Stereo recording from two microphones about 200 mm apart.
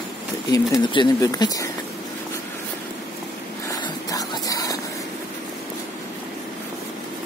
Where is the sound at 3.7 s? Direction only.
15° left (ahead or behind).